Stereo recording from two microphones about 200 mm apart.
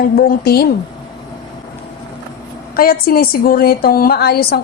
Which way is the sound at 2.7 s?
50° left (ahead or behind).